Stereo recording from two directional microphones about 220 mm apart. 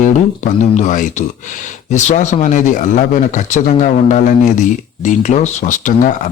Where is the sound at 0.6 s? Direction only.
35° left (ahead or behind).